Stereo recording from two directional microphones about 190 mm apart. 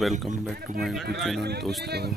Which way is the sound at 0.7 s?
Centre (ahead or behind).